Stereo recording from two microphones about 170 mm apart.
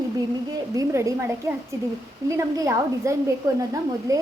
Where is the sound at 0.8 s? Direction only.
15° right (ahead or behind).